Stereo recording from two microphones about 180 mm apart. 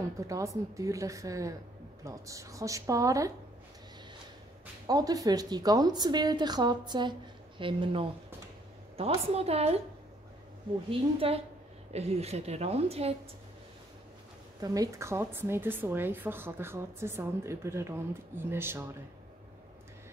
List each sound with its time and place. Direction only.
0.3 s a woman's voice: 15° right (ahead or behind)
4.8 s a woman's voice: 20° right (ahead or behind)
10.9 s a woman's voice: 30° right (ahead or behind)
14.6 s a woman's voice: 20° right (ahead or behind)